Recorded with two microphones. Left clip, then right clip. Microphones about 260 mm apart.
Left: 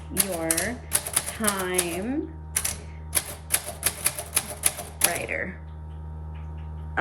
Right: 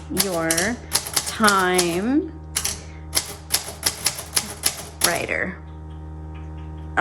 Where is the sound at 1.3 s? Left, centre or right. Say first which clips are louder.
Right 11 dB; centre.